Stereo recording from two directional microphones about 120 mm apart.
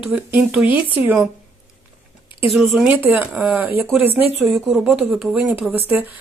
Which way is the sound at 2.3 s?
50° left (ahead or behind).